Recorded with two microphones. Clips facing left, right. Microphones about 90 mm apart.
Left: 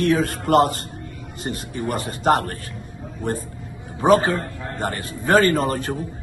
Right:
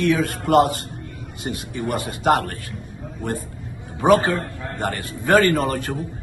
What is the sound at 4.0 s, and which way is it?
A man's voice, 20° left (ahead or behind).